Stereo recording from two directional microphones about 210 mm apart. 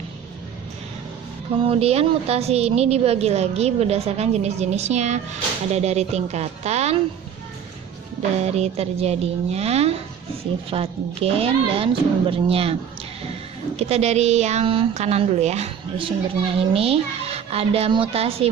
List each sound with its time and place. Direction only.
1.6 s a woman's voice: 25° right (ahead or behind)
8.4 s a woman's voice: 30° right (ahead or behind)
13.7 s a woman's voice: 30° right (ahead or behind)